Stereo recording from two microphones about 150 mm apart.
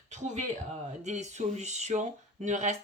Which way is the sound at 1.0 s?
50° right (ahead or behind).